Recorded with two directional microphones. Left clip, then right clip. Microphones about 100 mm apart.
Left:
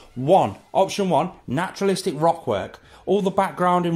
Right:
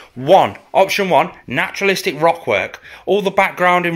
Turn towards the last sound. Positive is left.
turn(degrees=30)  # may be behind; listen again after turning